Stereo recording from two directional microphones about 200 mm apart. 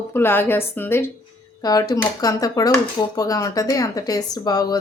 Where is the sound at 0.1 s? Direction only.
10° left (ahead or behind).